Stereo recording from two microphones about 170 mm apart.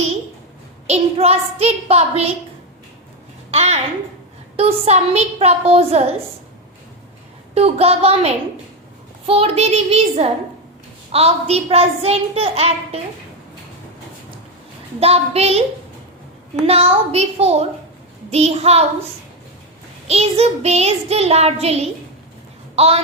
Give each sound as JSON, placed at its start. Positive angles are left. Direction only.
{"t": 0.9, "sound": "a child's voice", "side_deg": -40}
{"t": 3.5, "sound": "a child's voice", "side_deg": -40}
{"t": 7.5, "sound": "a child's voice", "side_deg": -35}
{"t": 15.0, "sound": "a child's voice", "side_deg": -35}
{"t": 16.6, "sound": "a child's voice", "side_deg": -35}
{"t": 20.1, "sound": "a child's voice", "side_deg": -40}